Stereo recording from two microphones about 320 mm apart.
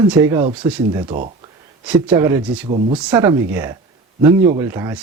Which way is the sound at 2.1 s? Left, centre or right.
Centre.